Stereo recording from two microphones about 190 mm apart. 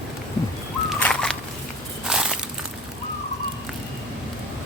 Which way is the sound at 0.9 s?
5° left (ahead or behind).